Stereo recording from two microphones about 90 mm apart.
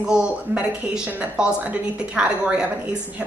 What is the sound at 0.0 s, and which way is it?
A woman's voice, 10° right (ahead or behind).